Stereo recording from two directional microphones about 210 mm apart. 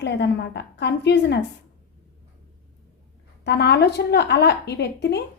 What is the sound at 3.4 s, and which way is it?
A woman's voice, 55° left (ahead or behind).